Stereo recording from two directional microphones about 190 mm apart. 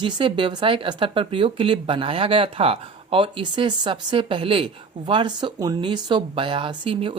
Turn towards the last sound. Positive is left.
turn(degrees=-30)  # may be behind; listen again after turning